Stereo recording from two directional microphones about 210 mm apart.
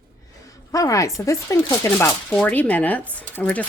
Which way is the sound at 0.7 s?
15° left (ahead or behind).